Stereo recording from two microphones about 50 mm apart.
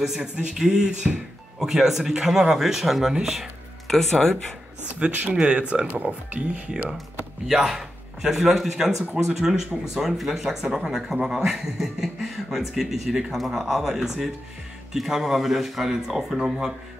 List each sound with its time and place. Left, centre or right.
0.0 s speech: centre
3.8 s speech: centre
4.8 s speech: right
7.4 s speech: centre